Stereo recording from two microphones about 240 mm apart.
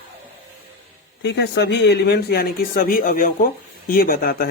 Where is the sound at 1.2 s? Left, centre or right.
Left.